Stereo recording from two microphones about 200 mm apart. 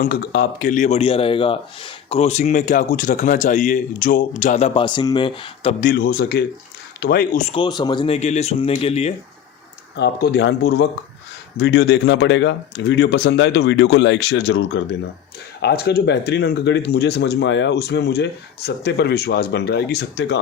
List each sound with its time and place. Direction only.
0.0 s a man's voice: 50° left (ahead or behind); by 5.7 s 25° left (ahead or behind)
5.8 s a man's voice: 50° left (ahead or behind)
7.5 s speech: 20° left (ahead or behind)
10.0 s speech: 55° left (ahead or behind)
15.6 s speech: 50° left (ahead or behind)